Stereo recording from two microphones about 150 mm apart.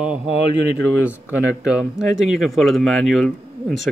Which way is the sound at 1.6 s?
5° right (ahead or behind).